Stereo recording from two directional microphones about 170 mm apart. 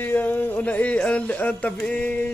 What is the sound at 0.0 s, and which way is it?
A man's voice, 10° left (ahead or behind).